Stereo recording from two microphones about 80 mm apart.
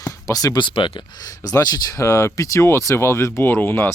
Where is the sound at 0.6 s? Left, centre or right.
Left.